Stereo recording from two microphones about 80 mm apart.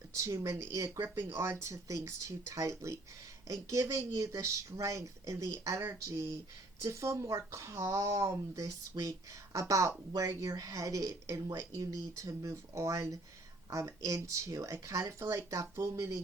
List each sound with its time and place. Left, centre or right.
0.1 s speech: right
6.8 s speech: right